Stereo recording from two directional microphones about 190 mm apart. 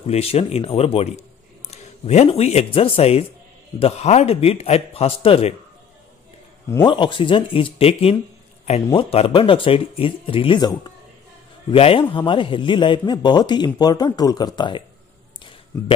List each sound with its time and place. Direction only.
0.0 s a man's voice: 30° left (ahead or behind)
6.7 s speech: 25° left (ahead or behind)